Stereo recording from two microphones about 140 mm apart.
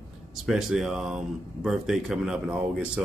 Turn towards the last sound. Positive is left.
turn(degrees=-5)  # may be behind; listen again after turning